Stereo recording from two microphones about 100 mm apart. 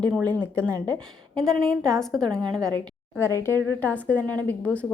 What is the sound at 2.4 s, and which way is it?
Speech, 45° right (ahead or behind).